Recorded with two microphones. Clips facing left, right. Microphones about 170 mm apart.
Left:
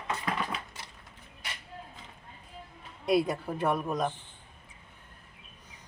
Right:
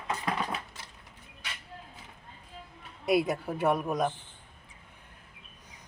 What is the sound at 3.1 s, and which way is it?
Speech, 5° right (ahead or behind).